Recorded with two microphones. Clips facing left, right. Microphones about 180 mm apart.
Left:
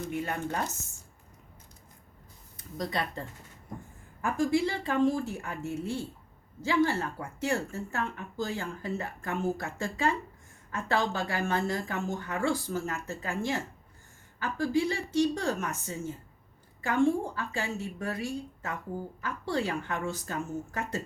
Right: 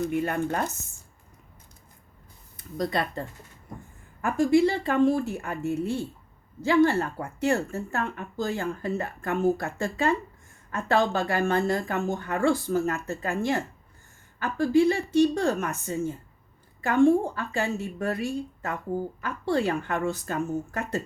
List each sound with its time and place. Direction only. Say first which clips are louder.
0.1 s speech: right 6 dB; 55° right (ahead or behind)
2.7 s speech: right 6 dB; 55° right (ahead or behind)
4.2 s speech: right 6 dB; 65° right (ahead or behind)